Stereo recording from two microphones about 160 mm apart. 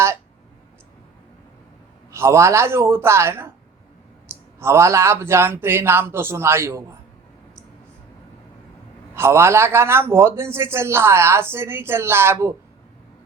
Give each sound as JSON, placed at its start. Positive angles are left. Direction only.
{"t": 2.1, "sound": "a man's voice", "side_deg": -15}
{"t": 4.6, "sound": "a man's voice", "side_deg": -15}
{"t": 9.1, "sound": "a man's voice", "side_deg": -15}